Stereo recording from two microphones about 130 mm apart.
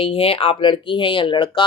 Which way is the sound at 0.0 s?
45° left (ahead or behind).